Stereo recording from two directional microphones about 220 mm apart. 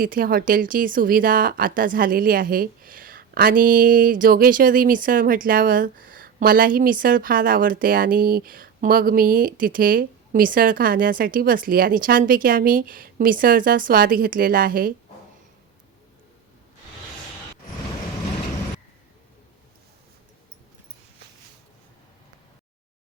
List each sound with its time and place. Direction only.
0.0 s speech: 40° right (ahead or behind)